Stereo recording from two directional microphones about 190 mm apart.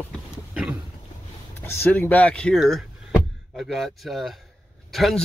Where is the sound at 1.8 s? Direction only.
10° left (ahead or behind).